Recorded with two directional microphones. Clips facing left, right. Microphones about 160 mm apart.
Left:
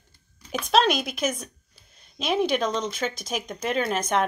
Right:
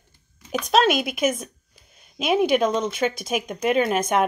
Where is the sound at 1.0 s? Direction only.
50° right (ahead or behind).